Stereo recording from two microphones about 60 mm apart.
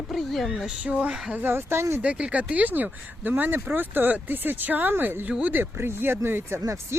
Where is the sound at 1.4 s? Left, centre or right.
Right.